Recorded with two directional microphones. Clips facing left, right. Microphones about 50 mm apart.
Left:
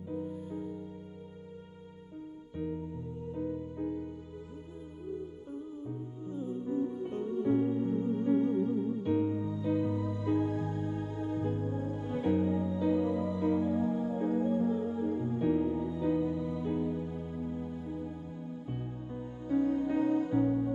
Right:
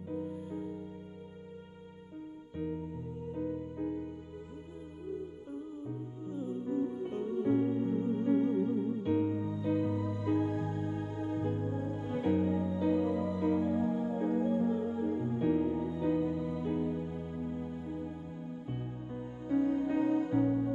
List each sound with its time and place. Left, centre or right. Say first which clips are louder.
0.1 s music: even; right
2.5 s music: left 1 dB; right
5.9 s music: even; right